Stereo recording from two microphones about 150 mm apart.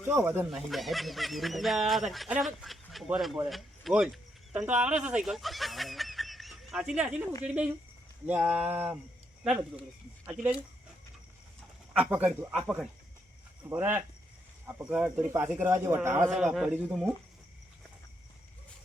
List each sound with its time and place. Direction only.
0.1 s speech: 15° right (ahead or behind)
0.5 s speech: centre (ahead or behind)
11.9 s speech: 10° right (ahead or behind)